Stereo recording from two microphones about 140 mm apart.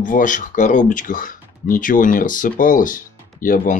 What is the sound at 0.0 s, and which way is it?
Speech, 70° left (ahead or behind).